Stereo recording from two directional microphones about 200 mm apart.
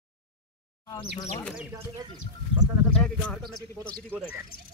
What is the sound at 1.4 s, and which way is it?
Speech, 5° right (ahead or behind).